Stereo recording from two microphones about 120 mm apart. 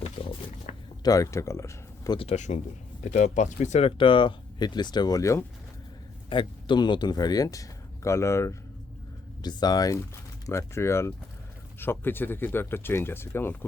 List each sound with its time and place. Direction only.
0.0 s roaring cats: 55° left (ahead or behind)
0.7 s a sound: 90° left
1.0 s speech: 30° left (ahead or behind)
2.1 s speech: 65° left (ahead or behind)
3.8 s speech: 45° left (ahead or behind); by 5.5 s 25° left (ahead or behind)
6.3 s speech: 40° left (ahead or behind); by 8.5 s 25° left (ahead or behind)
9.4 s speech: 35° left (ahead or behind); by 13.7 s 20° left (ahead or behind)